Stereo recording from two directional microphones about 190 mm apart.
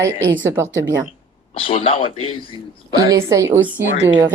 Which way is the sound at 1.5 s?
30° left (ahead or behind).